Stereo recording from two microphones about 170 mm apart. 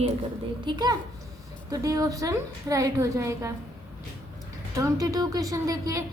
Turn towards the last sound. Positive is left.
turn(degrees=-20)  # may be behind; listen again after turning